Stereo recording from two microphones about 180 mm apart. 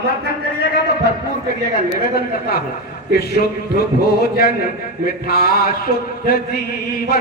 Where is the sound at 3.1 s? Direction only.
60° left (ahead or behind).